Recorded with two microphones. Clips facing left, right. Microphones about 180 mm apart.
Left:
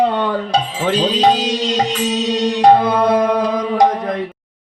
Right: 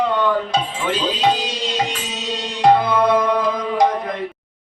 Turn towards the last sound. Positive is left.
turn(degrees=40)  # may be behind; listen again after turning